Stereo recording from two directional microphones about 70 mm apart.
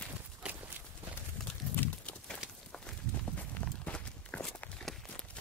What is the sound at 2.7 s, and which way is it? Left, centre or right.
Walk, centre.